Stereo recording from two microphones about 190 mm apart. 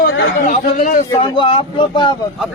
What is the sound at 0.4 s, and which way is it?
Speech, 40° left (ahead or behind).